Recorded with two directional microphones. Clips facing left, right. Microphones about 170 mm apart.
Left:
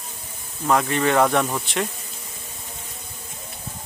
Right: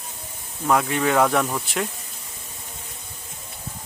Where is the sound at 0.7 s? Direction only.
5° right (ahead or behind).